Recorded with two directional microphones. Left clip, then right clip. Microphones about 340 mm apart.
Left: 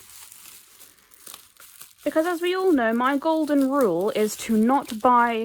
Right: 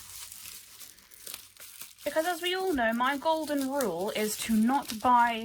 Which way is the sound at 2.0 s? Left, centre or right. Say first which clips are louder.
Left 6 dB; centre.